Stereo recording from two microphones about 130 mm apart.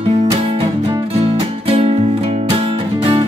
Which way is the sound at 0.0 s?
50° right (ahead or behind).